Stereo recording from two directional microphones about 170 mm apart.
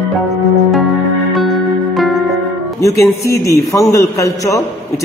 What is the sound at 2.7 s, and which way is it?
A man's voice, 15° left (ahead or behind).